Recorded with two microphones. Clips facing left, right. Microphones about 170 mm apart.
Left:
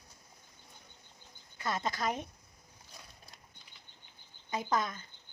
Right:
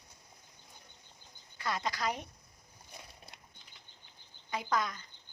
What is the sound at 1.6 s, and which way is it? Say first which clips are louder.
Speech: left 1 dB; 25° left (ahead or behind).